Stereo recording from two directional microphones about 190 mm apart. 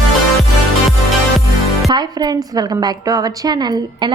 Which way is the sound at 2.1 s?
20° right (ahead or behind).